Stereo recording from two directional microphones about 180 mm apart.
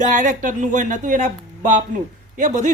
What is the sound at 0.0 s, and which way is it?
Speech, 45° right (ahead or behind).